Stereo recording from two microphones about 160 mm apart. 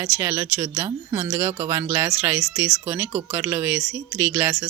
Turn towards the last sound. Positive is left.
turn(degrees=-10)  # may be behind; listen again after turning